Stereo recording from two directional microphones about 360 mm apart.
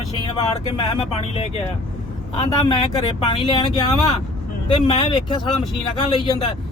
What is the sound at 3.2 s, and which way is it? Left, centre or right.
Speech, centre.